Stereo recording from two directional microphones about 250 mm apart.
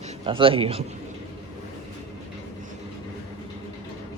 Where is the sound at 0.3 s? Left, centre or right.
Right.